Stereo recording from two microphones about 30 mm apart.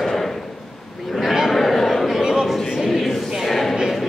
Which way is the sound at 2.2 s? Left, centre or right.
Centre.